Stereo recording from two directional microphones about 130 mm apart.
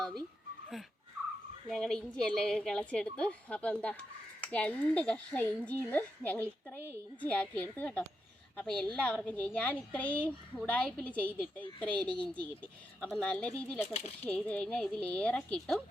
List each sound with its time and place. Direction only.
1.7 s a woman's voice: 5° left (ahead or behind)
13.8 s speech: 55° left (ahead or behind)
14.3 s a woman's voice: 10° left (ahead or behind)